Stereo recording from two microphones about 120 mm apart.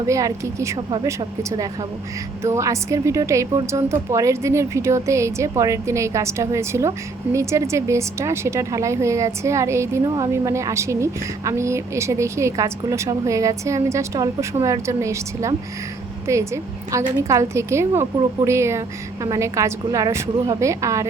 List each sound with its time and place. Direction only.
0.1 s a woman's voice: 25° right (ahead or behind)